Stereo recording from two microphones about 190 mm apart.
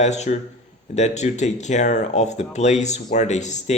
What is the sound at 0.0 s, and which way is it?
Speech, 35° left (ahead or behind).